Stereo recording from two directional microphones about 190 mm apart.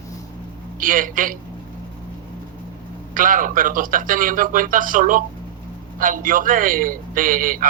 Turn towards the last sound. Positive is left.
turn(degrees=-45)  # may be behind; listen again after turning